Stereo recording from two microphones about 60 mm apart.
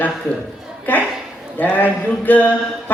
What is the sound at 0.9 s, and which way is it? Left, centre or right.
A woman's voice, left.